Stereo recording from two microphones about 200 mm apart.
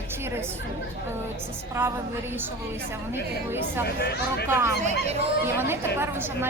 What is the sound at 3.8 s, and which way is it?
Speech, 55° left (ahead or behind).